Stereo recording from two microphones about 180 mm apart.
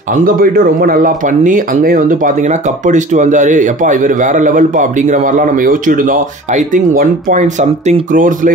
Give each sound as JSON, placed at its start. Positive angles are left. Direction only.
{"t": 0.1, "sound": "speech", "side_deg": -50}